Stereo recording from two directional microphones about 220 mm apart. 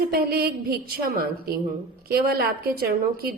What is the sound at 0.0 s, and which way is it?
A woman's voice, 45° right (ahead or behind).